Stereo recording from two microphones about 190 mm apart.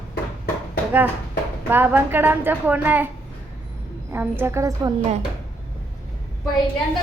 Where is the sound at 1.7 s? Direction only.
10° right (ahead or behind).